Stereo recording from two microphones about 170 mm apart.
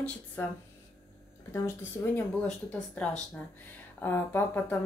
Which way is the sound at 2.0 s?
15° left (ahead or behind).